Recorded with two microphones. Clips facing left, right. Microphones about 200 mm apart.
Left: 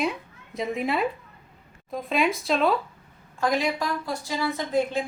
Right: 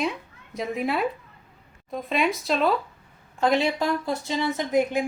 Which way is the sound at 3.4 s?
25° right (ahead or behind).